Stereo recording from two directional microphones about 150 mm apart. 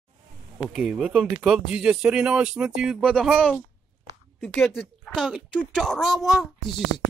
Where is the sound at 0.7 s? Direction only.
Centre (ahead or behind).